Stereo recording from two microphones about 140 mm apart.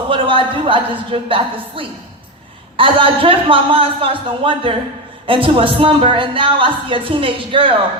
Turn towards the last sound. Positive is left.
turn(degrees=-40)  # may be behind; listen again after turning